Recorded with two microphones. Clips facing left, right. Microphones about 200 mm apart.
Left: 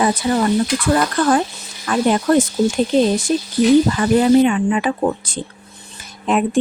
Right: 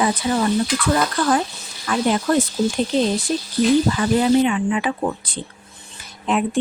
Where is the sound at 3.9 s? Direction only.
50° left (ahead or behind).